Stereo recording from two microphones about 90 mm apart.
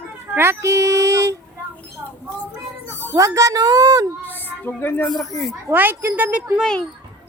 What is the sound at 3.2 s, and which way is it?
Speech, 35° right (ahead or behind).